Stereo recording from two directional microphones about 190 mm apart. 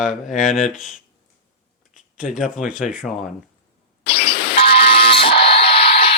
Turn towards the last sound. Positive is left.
turn(degrees=30)  # may be behind; listen again after turning